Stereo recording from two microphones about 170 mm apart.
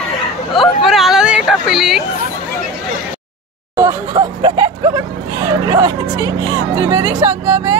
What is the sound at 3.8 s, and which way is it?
Speech, 20° right (ahead or behind).